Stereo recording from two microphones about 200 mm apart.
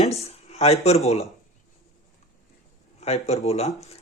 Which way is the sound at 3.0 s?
30° left (ahead or behind).